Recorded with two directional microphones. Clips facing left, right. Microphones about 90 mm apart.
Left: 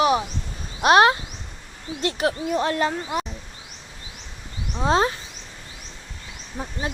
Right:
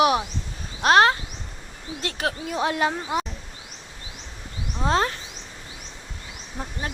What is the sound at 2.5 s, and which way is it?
Speech, 10° right (ahead or behind).